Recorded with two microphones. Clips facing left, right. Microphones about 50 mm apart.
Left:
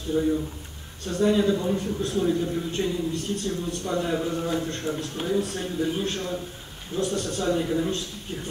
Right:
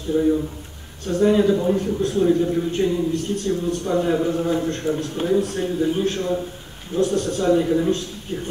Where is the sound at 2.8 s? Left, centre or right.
Centre.